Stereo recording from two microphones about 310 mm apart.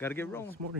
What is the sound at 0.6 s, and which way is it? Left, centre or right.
Speech, right.